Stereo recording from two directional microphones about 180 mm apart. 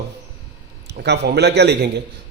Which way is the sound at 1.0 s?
65° right (ahead or behind).